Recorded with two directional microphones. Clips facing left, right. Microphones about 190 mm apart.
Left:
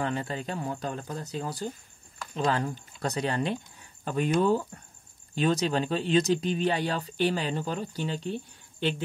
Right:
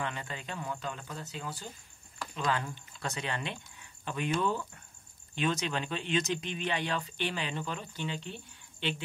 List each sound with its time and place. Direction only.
0.0 s speech: 40° left (ahead or behind)